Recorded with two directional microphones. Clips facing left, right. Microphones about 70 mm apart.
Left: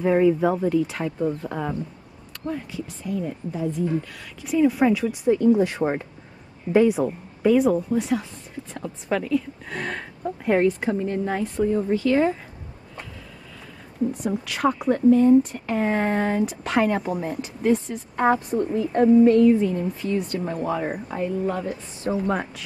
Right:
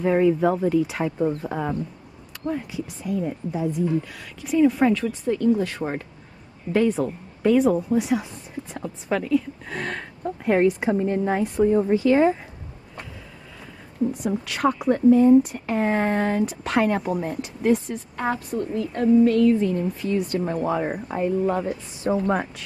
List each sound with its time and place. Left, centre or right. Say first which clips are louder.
0.0 s a woman's voice: even; centre
5.0 s a woman's voice: left 3 dB; centre
7.5 s speech: right 1 dB; centre
10.8 s a woman's voice: right 2 dB; centre
14.2 s speech: even; centre
18.1 s a woman's voice: left 6 dB; left
19.5 s a woman's voice: even; centre